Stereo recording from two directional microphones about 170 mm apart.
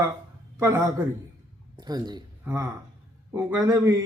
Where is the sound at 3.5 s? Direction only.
20° right (ahead or behind).